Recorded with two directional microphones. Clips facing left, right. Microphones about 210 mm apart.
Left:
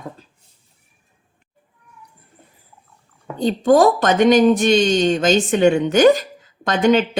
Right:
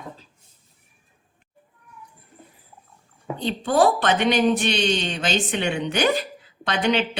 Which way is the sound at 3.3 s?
40° left (ahead or behind).